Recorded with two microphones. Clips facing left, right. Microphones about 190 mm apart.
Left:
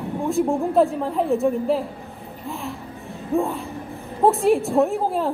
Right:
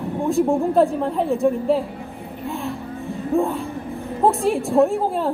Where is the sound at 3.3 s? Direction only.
Centre (ahead or behind).